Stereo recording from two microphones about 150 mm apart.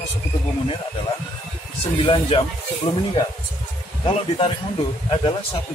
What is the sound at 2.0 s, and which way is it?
Speech, 35° left (ahead or behind).